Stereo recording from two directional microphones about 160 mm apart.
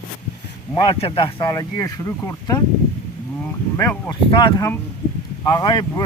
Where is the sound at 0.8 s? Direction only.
35° left (ahead or behind).